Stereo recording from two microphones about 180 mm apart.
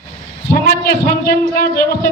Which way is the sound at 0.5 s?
55° left (ahead or behind).